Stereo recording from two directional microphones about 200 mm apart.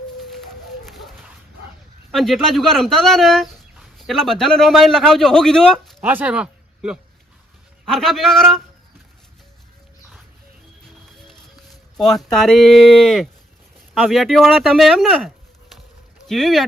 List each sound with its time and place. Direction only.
0.9 s dog: centre (ahead or behind)
2.1 s speech: centre (ahead or behind)
6.0 s speech: 10° right (ahead or behind)
11.3 s speech: centre (ahead or behind)